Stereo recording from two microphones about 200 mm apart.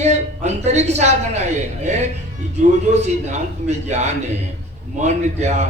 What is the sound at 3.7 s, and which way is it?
A man's voice, 35° right (ahead or behind).